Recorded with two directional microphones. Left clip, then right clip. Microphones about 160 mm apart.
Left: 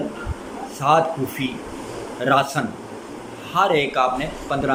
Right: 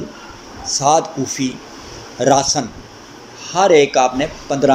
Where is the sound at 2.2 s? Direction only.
40° right (ahead or behind).